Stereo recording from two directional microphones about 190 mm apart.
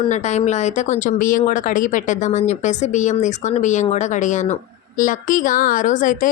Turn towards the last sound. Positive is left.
turn(degrees=45)  # may be behind; listen again after turning